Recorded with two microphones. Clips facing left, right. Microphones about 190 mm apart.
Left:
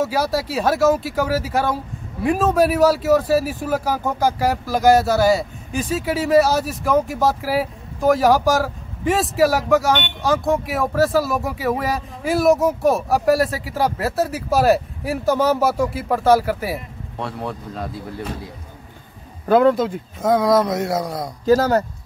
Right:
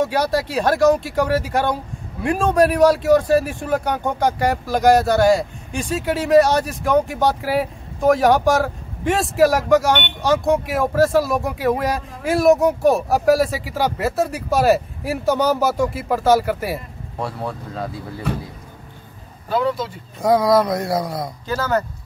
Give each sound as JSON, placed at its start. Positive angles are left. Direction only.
{"t": 0.0, "sound": "speech", "side_deg": 5}
{"t": 19.4, "sound": "speech", "side_deg": 50}
{"t": 20.2, "sound": "speech", "side_deg": 0}
{"t": 21.5, "sound": "speech", "side_deg": 35}